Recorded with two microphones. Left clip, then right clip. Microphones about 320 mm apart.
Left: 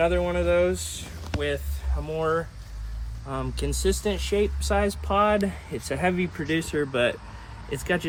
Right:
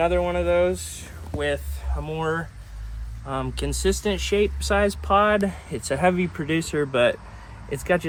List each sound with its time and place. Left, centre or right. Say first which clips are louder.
0.0 s speech: right 2 dB; centre
1.3 s speech: right 3 dB; centre